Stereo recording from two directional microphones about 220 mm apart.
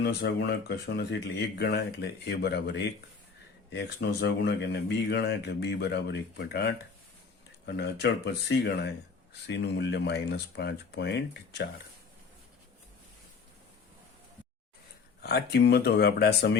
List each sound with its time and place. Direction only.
0.0 s speech: 50° left (ahead or behind)
15.2 s speech: 45° left (ahead or behind)